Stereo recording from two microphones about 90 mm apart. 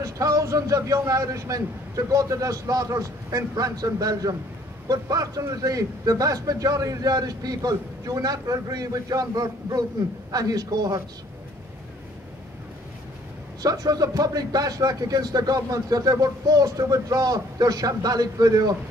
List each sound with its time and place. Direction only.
0.0 s a man's voice: 40° right (ahead or behind)
13.6 s a man's voice: 45° right (ahead or behind)